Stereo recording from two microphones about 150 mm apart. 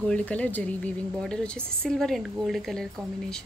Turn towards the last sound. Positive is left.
turn(degrees=5)  # may be behind; listen again after turning